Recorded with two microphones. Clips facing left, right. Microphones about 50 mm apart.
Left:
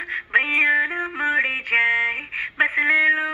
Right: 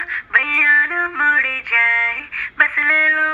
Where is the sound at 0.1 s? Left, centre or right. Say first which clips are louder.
Right 3 dB; right.